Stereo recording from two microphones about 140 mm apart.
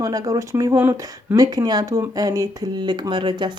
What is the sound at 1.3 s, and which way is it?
Speech, 25° right (ahead or behind).